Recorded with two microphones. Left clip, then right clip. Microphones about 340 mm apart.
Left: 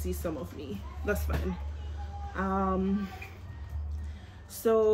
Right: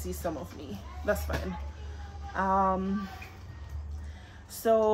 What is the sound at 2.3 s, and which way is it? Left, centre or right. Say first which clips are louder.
Speech: right 5 dB; centre.